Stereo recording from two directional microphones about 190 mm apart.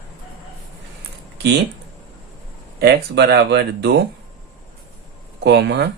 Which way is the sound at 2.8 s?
60° right (ahead or behind).